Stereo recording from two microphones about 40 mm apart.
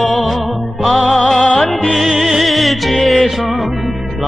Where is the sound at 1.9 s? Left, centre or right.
Centre.